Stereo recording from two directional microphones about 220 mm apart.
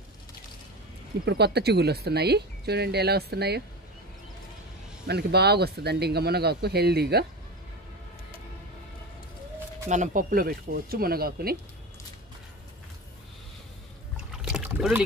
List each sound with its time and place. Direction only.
1.2 s speech: 50° right (ahead or behind)
5.0 s speech: 50° right (ahead or behind)
9.8 s speech: 35° right (ahead or behind)
14.1 s rowboat: 5° right (ahead or behind)